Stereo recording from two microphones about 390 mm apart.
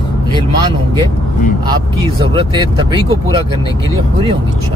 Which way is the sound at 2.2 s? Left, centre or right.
Centre.